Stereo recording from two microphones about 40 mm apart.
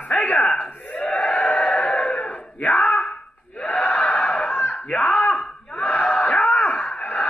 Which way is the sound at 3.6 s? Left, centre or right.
Left.